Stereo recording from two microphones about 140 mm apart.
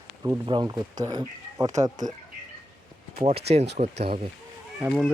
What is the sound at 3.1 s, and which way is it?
Speech, 45° right (ahead or behind).